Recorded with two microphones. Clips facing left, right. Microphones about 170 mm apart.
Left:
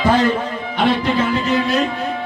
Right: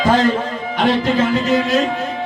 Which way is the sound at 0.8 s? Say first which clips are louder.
Right 1 dB; 45° right (ahead or behind).